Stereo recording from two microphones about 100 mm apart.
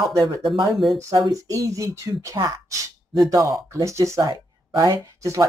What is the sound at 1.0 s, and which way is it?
Speech, 35° right (ahead or behind).